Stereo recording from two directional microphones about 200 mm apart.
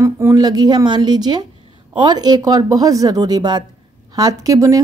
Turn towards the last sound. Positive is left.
turn(degrees=-15)  # may be behind; listen again after turning